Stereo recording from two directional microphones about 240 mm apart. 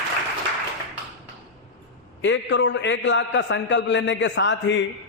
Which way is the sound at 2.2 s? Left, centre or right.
Left.